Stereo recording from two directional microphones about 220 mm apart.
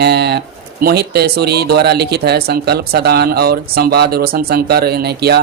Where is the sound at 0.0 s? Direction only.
50° right (ahead or behind).